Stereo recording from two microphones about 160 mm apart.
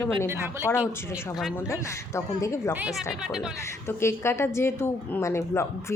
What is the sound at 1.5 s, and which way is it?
A woman's voice, 15° left (ahead or behind).